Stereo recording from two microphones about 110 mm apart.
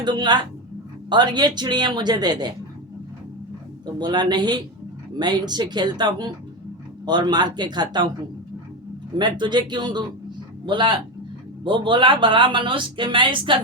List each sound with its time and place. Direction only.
0.0 s speech: 40° right (ahead or behind)
3.9 s speech: 40° right (ahead or behind)
9.1 s speech: 45° right (ahead or behind)